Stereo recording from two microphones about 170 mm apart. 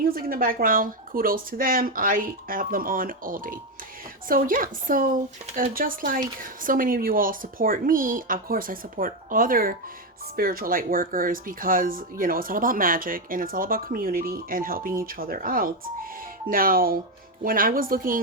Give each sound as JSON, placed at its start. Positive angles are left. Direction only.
{"t": 0.0, "sound": "speech", "side_deg": -60}